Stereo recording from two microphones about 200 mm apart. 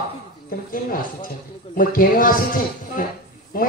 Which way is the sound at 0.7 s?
45° left (ahead or behind).